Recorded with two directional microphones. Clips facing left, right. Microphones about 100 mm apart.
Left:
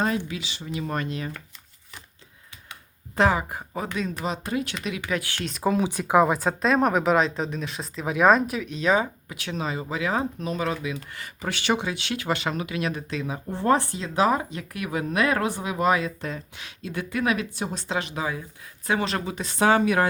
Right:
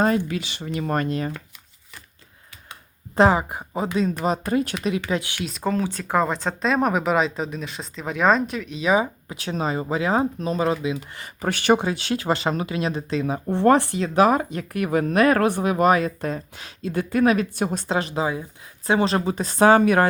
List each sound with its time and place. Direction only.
0.3 s speech: 55° right (ahead or behind)
3.2 s speech: 30° right (ahead or behind)
3.5 s speech: 15° right (ahead or behind)
4.2 s speech: 45° right (ahead or behind)
5.0 s speech: 20° right (ahead or behind)
5.4 s speech: centre (ahead or behind)
5.7 s speech: 15° left (ahead or behind); by 9.0 s 5° right (ahead or behind)
9.3 s speech: 35° right (ahead or behind)
11.3 s speech: 50° right (ahead or behind)
13.5 s speech: 70° right (ahead or behind); by 20.1 s 50° right (ahead or behind)